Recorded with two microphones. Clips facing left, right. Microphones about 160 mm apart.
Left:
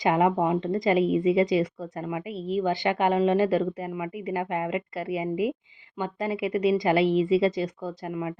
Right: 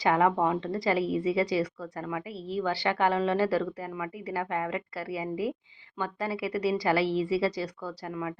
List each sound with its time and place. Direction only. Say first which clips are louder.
0.0 s a woman's voice: left 2 dB; 20° left (ahead or behind)